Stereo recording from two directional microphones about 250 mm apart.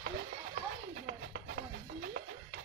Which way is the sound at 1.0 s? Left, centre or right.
Right.